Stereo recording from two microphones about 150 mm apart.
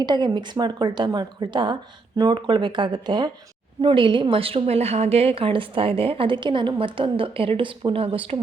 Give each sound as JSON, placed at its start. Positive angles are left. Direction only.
{"t": 0.0, "sound": "a woman's voice", "side_deg": -30}